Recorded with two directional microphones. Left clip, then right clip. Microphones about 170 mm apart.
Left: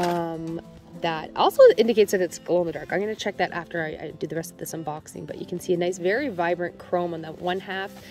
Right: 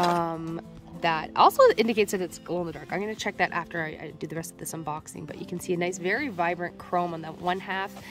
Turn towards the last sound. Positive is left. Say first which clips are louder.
# left 1 dB
turn(degrees=0)  # may be behind; listen again after turning